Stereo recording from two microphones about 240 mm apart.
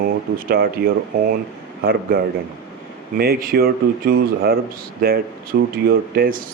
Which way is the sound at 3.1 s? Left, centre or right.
Right.